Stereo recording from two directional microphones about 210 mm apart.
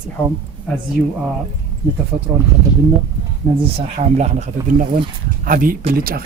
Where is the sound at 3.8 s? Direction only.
30° right (ahead or behind).